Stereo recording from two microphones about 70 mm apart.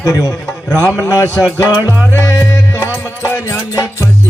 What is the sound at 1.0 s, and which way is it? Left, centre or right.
Music, left.